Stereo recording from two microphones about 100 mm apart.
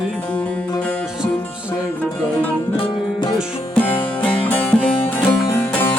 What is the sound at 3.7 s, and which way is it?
Music, 15° left (ahead or behind).